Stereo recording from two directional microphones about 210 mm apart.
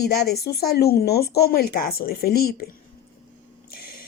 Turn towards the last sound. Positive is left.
turn(degrees=45)  # may be behind; listen again after turning